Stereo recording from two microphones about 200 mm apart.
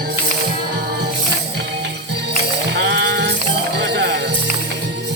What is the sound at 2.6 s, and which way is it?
Livestock, 60° right (ahead or behind).